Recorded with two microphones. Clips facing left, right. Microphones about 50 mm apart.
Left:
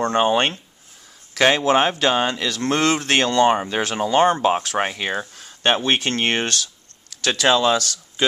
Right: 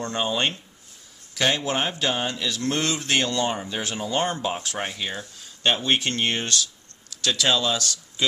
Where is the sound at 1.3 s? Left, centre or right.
Left.